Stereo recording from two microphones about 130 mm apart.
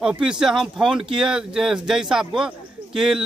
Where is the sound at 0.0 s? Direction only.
5° right (ahead or behind).